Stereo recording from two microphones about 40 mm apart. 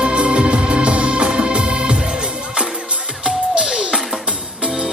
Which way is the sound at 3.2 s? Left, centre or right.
Right.